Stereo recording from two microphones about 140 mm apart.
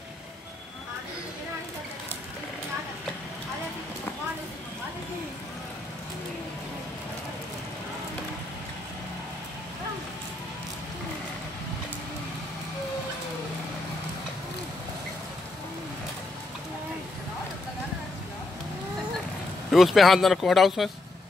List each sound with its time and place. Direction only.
19.7 s speech: centre (ahead or behind)